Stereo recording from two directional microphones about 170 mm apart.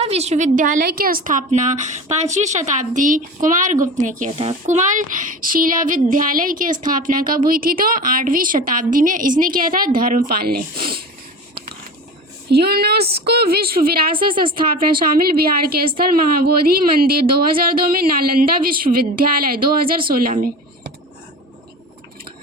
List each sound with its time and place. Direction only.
0.0 s speech: 40° right (ahead or behind); by 11.0 s 60° right (ahead or behind)
12.5 s a woman's voice: 70° right (ahead or behind)